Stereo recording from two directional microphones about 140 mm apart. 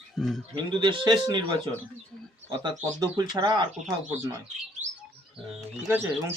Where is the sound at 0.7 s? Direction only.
35° right (ahead or behind).